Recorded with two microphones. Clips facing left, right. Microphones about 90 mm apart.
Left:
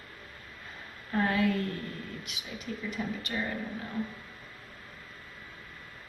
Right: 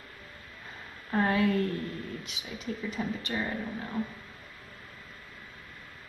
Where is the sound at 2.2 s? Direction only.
30° right (ahead or behind).